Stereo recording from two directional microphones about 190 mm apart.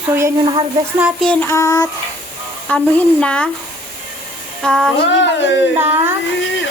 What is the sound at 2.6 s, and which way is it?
Speech, 5° left (ahead or behind).